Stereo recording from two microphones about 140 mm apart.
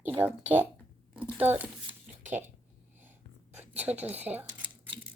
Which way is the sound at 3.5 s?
10° right (ahead or behind).